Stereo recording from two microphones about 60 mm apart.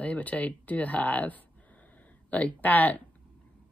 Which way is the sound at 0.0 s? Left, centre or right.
Left.